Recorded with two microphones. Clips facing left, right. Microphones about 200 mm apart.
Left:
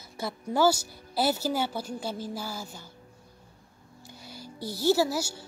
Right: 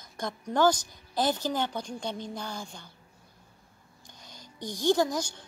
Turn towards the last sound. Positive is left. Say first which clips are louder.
# left 1 dB
turn(degrees=5)  # may be behind; listen again after turning